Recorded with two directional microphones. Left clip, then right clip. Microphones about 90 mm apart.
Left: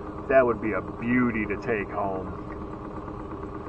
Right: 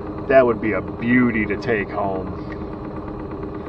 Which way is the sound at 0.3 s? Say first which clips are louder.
Right 6 dB; 30° right (ahead or behind).